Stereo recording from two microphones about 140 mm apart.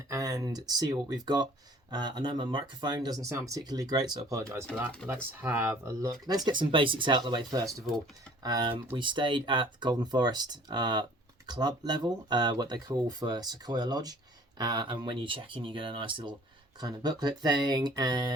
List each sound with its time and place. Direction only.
0.1 s speech: 25° right (ahead or behind)
9.0 s speech: 35° right (ahead or behind)